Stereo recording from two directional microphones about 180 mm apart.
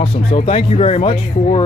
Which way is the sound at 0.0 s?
30° left (ahead or behind).